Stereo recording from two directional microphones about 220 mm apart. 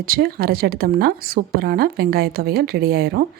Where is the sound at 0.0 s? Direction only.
45° right (ahead or behind).